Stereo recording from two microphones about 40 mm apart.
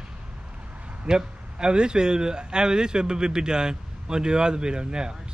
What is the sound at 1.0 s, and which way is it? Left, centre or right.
Speech, centre.